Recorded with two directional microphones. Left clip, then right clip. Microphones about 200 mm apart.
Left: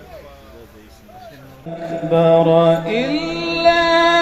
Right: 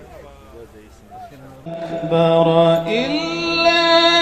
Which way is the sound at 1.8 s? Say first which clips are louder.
Left 2 dB; 40° left (ahead or behind).